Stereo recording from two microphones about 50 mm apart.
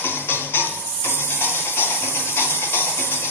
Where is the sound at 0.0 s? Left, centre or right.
Left.